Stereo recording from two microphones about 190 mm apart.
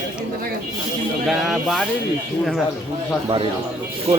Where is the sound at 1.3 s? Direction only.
Centre (ahead or behind).